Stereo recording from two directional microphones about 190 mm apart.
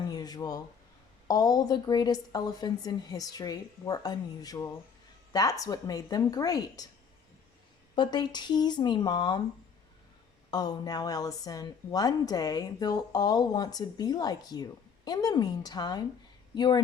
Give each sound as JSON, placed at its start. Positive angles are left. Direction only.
{"t": 0.1, "sound": "a sound", "side_deg": 20}
{"t": 1.3, "sound": "a woman's voice", "side_deg": 20}
{"t": 7.9, "sound": "a woman's voice", "side_deg": 25}
{"t": 10.5, "sound": "a woman's voice", "side_deg": 20}